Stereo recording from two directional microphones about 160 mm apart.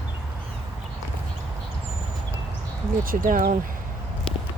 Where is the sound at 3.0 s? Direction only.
60° right (ahead or behind).